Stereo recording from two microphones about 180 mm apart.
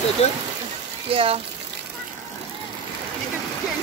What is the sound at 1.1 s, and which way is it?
Speech, 30° right (ahead or behind).